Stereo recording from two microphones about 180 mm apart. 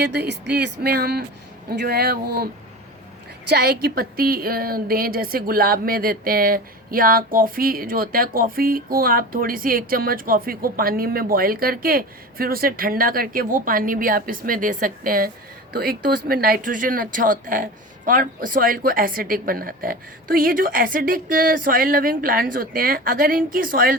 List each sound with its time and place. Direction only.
0.0 s speech: 65° right (ahead or behind)
3.5 s a woman's voice: 65° right (ahead or behind)